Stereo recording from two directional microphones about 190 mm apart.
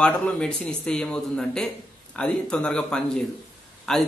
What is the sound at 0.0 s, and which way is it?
A man's voice, 5° left (ahead or behind).